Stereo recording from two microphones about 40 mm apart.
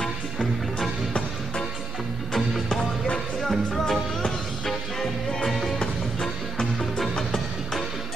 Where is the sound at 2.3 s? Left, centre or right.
Centre.